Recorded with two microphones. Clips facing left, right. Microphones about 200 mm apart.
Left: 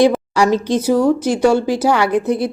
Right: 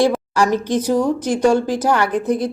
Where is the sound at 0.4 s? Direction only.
70° left (ahead or behind).